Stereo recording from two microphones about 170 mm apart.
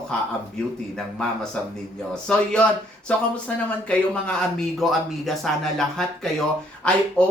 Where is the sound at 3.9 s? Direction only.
5° left (ahead or behind).